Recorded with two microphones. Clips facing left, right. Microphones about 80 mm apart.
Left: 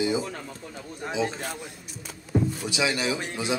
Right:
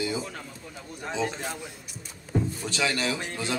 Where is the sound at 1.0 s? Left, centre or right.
Centre.